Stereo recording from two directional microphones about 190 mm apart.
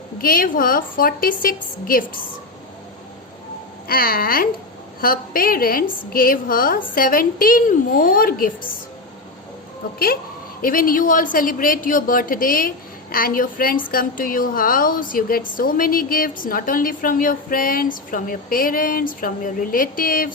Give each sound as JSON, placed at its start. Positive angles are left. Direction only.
{"t": 0.2, "sound": "a woman's voice", "side_deg": 50}
{"t": 3.8, "sound": "a woman's voice", "side_deg": 50}
{"t": 10.6, "sound": "a woman's voice", "side_deg": 50}